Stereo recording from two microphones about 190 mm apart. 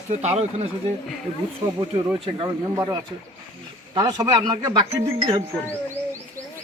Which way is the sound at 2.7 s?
15° right (ahead or behind).